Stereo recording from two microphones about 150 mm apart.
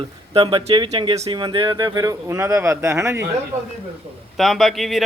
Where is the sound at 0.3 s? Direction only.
35° right (ahead or behind); by 3.2 s 20° right (ahead or behind).